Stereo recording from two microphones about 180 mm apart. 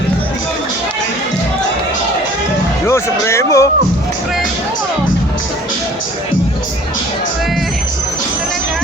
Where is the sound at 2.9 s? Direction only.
15° left (ahead or behind).